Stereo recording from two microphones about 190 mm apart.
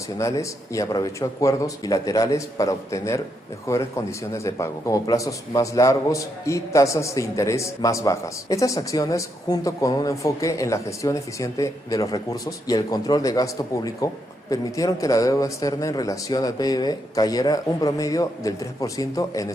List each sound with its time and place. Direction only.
0.2 s a man's voice: 15° left (ahead or behind)